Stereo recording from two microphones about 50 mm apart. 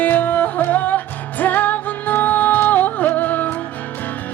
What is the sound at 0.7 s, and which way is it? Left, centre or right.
Music, left.